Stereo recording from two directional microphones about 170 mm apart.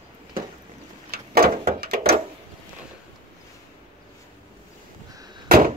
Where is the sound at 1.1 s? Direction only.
65° right (ahead or behind).